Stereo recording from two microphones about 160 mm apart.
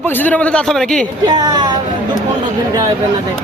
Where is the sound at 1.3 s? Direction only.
25° right (ahead or behind).